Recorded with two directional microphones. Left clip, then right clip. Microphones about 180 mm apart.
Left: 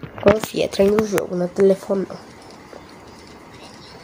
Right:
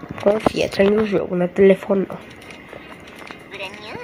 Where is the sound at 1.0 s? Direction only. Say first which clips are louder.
Right 1 dB; 15° right (ahead or behind).